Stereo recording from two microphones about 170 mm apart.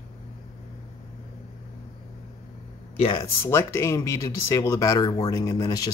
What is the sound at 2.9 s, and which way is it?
Speech, 30° left (ahead or behind).